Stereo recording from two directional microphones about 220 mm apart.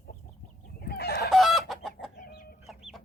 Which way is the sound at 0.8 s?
45° left (ahead or behind).